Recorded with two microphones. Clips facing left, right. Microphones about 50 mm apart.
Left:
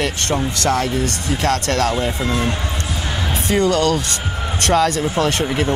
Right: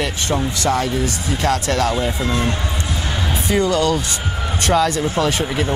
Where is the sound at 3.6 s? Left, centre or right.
Left.